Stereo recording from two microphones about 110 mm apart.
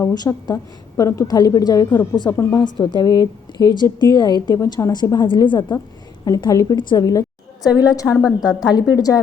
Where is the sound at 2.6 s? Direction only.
40° left (ahead or behind).